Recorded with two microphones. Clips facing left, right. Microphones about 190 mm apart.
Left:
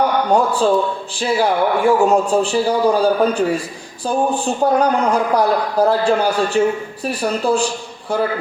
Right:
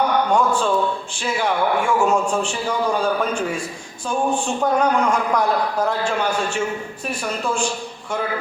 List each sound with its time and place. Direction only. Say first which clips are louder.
0.3 s a man's voice: left 4 dB; 35° left (ahead or behind)